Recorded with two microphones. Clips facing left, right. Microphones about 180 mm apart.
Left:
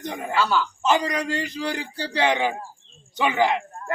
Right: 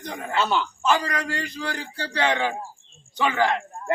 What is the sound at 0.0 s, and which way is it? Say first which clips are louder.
Speech: left 3 dB; 20° left (ahead or behind).